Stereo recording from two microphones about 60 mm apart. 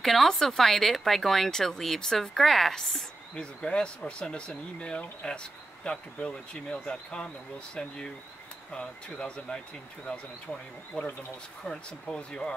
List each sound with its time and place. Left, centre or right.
0.0 s speech: centre
8.7 s speech: centre
10.9 s speech: centre